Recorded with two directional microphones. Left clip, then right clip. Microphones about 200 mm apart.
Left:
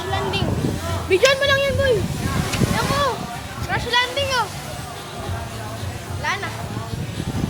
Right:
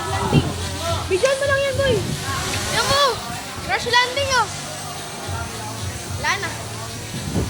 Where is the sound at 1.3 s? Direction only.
45° left (ahead or behind).